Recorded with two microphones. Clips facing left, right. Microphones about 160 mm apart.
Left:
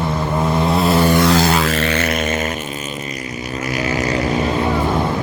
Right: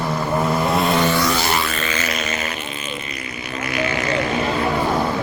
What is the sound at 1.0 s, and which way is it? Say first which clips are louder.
Vehicle: left 4 dB; 40° left (ahead or behind).